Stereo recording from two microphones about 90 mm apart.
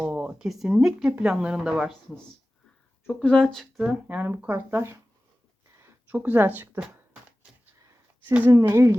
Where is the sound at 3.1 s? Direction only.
5° left (ahead or behind).